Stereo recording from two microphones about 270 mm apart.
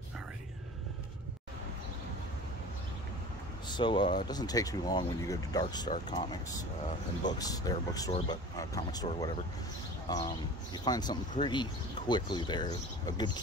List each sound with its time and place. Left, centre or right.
3.6 s speech: centre